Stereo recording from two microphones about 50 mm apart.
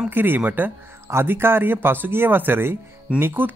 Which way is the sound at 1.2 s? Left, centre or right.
Right.